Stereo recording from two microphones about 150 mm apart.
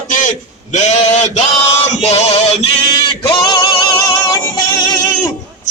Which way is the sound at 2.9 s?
30° left (ahead or behind).